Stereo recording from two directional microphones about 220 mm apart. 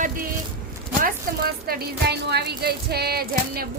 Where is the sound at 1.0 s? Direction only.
45° right (ahead or behind).